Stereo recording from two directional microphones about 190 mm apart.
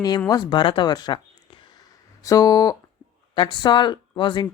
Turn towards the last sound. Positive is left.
turn(degrees=25)  # may be behind; listen again after turning